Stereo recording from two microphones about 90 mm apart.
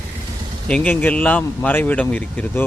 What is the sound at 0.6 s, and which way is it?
Speech, 15° left (ahead or behind).